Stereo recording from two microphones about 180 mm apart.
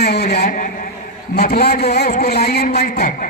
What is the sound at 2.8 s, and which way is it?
Speech, 45° left (ahead or behind).